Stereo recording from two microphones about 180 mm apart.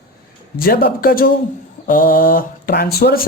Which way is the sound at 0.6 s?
55° left (ahead or behind).